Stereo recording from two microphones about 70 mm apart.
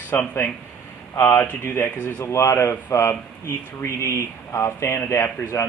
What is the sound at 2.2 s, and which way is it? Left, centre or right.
Speech, left.